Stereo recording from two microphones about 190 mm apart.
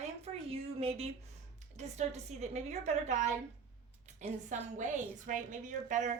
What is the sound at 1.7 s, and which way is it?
A woman's voice, 35° right (ahead or behind).